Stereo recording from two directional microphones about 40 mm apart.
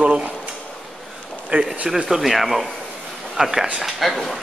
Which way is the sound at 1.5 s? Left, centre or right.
Right.